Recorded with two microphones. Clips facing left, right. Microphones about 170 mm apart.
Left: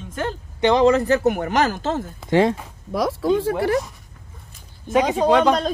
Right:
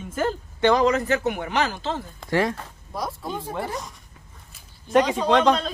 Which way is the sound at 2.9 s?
90° left.